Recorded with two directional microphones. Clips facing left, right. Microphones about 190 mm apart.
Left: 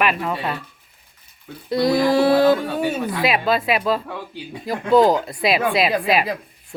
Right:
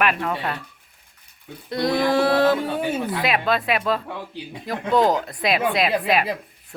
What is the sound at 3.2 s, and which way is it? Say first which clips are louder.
Speech: left 4 dB; 5° left (ahead or behind).